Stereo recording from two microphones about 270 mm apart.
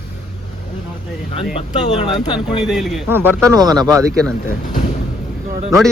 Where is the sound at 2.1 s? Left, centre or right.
Centre.